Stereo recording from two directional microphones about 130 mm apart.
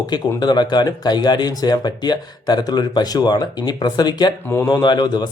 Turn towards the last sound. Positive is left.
turn(degrees=35)  # may be behind; listen again after turning